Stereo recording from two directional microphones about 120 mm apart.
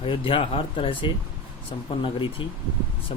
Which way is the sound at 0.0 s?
50° left (ahead or behind).